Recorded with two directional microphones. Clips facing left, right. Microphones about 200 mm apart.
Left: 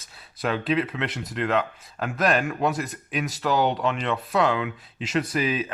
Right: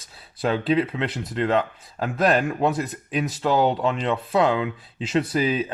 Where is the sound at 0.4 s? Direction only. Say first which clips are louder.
Right 3 dB; 25° right (ahead or behind).